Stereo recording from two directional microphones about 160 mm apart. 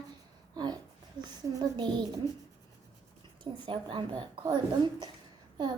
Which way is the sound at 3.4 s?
30° right (ahead or behind).